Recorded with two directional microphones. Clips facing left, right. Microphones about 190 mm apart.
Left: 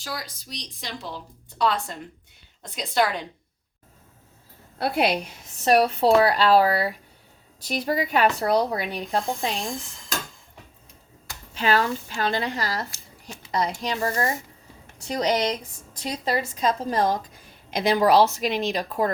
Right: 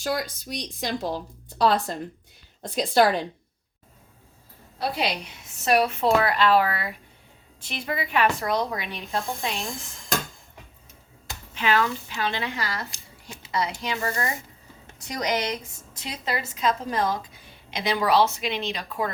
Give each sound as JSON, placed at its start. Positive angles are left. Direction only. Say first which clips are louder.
{"t": 0.0, "sound": "a woman's voice", "louder": "right 7 dB", "side_deg": -55}
{"t": 4.8, "sound": "a woman's voice", "louder": "left 4 dB", "side_deg": 55}
{"t": 5.6, "sound": "speech", "louder": "left 3 dB", "side_deg": 35}
{"t": 11.5, "sound": "speech", "louder": "left 1 dB", "side_deg": 35}